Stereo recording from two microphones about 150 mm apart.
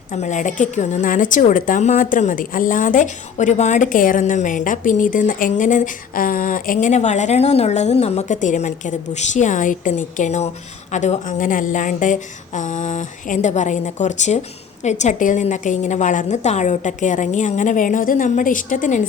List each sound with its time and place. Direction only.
0.1 s a woman's voice: 55° left (ahead or behind)